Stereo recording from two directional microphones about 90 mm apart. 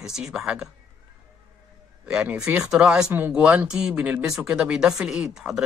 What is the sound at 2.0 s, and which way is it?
Speech, 15° right (ahead or behind).